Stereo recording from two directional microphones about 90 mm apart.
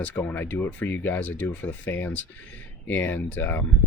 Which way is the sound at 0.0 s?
20° left (ahead or behind).